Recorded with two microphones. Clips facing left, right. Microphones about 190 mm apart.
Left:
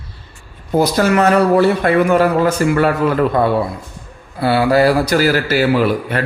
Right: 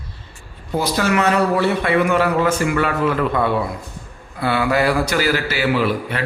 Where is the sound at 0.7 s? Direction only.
45° left (ahead or behind).